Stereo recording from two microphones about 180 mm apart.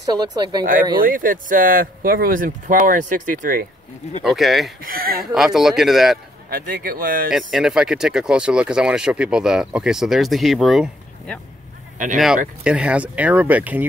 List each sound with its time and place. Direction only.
0.1 s speech: 25° right (ahead or behind)
1.0 s speech: 50° right (ahead or behind)
4.2 s speech: centre (ahead or behind)
4.8 s speech: 55° right (ahead or behind)
5.2 s speech: centre (ahead or behind)
6.5 s speech: 55° right (ahead or behind)
7.2 s speech: centre (ahead or behind)
12.6 s speech: 5° right (ahead or behind)